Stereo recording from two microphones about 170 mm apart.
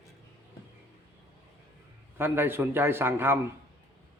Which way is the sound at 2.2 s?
15° right (ahead or behind).